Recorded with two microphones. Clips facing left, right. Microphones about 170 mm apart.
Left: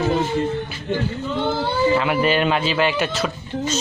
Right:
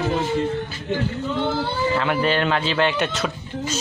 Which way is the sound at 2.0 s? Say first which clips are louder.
Left 2 dB; 10° left (ahead or behind).